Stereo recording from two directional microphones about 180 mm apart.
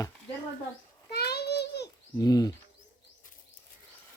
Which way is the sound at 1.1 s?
65° left (ahead or behind).